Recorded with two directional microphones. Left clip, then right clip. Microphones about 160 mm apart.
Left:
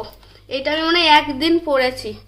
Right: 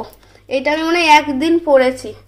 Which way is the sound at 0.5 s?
35° right (ahead or behind).